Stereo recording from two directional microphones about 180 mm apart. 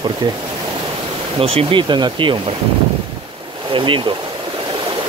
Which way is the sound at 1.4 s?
30° right (ahead or behind).